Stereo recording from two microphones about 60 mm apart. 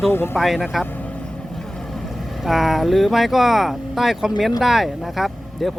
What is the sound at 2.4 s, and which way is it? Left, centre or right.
Speech, centre.